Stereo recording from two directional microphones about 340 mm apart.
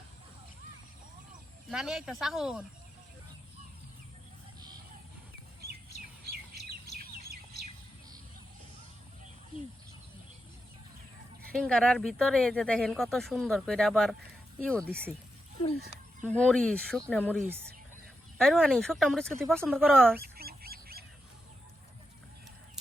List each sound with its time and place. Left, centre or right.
1.7 s speech: centre
6.6 s bird: centre
11.5 s speech: centre
16.2 s speech: centre
20.1 s goose: right